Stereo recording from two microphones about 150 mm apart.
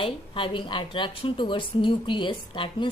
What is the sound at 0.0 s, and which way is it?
A woman's voice, 35° left (ahead or behind).